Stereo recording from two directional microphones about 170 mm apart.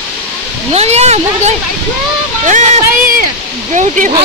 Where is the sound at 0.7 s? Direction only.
40° right (ahead or behind).